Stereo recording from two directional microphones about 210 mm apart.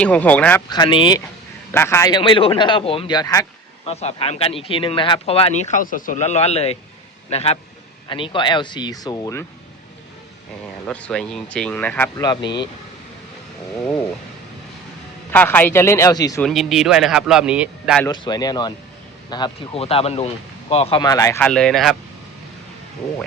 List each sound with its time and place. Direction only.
0.0 s speech: 5° left (ahead or behind)
0.7 s speech: 20° left (ahead or behind)
1.7 s speech: 10° left (ahead or behind)
3.8 s speech: 30° left (ahead or behind); by 9.5 s 15° left (ahead or behind)
10.8 s speech: 5° left (ahead or behind); by 12.6 s 20° left (ahead or behind)
15.3 s speech: 10° left (ahead or behind)
16.4 s speech: centre (ahead or behind)
18.0 s speech: 20° left (ahead or behind); by 21.9 s centre (ahead or behind)